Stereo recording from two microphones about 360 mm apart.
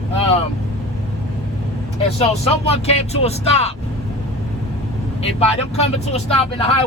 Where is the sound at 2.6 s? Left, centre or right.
Centre.